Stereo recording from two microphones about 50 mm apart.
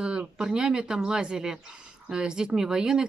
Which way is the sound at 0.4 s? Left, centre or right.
Centre.